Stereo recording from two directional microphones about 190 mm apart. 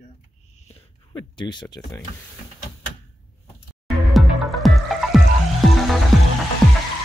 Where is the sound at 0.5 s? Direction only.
30° left (ahead or behind).